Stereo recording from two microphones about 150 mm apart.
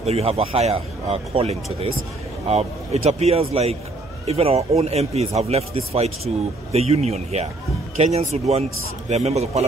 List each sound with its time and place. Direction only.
0.0 s speech: 45° right (ahead or behind)